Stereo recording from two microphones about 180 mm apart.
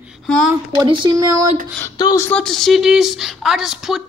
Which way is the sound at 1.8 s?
20° left (ahead or behind).